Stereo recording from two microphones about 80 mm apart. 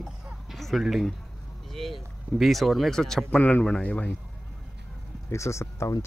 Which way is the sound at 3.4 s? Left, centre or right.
Centre.